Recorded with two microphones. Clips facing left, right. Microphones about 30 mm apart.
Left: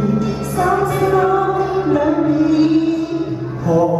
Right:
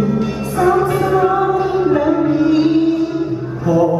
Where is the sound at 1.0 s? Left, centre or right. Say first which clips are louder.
Even; centre.